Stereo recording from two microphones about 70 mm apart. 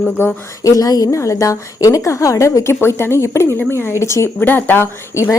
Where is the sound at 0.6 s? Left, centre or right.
Left.